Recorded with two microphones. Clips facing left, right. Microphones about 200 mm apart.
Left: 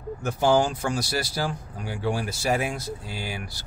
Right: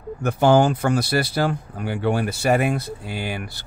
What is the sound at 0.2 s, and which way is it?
Speech, 60° right (ahead or behind).